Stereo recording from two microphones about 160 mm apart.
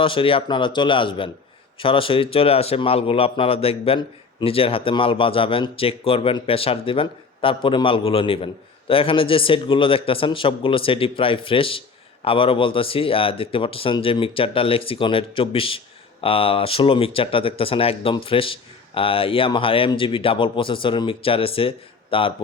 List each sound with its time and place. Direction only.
0.0 s speech: 35° left (ahead or behind)